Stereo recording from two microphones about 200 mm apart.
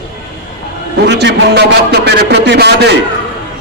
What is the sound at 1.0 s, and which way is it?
A man's voice, 60° right (ahead or behind).